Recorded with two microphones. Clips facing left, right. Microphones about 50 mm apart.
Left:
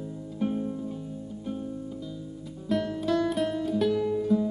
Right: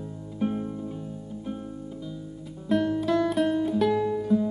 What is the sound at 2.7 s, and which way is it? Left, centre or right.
Music, centre.